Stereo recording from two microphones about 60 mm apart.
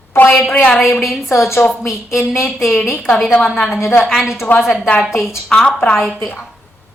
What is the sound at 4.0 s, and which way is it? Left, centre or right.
Speech, centre.